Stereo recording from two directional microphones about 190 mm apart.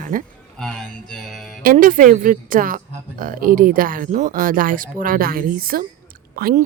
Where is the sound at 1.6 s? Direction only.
45° right (ahead or behind).